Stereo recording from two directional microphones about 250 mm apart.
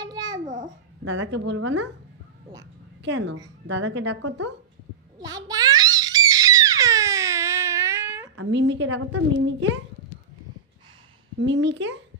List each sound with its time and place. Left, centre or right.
0.0 s babbling: centre
0.4 s babbling: right
1.0 s a woman's voice: right
3.0 s a woman's voice: right
5.2 s crying: centre
8.4 s a woman's voice: right
11.3 s a woman's voice: right